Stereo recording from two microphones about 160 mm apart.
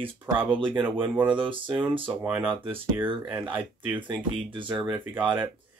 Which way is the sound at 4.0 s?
30° right (ahead or behind).